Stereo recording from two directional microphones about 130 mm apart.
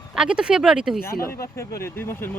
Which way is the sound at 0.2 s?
5° right (ahead or behind).